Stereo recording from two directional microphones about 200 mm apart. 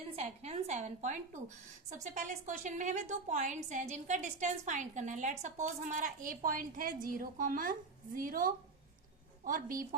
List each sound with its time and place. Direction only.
0.2 s a woman's voice: 30° right (ahead or behind)